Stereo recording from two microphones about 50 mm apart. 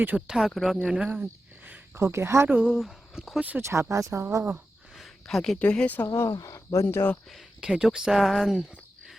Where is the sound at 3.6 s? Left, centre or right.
Right.